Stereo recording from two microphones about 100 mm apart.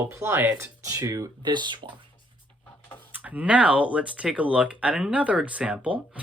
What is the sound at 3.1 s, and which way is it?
Speech, 15° right (ahead or behind).